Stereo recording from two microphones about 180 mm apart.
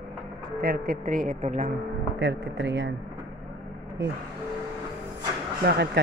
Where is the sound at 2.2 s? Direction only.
80° right.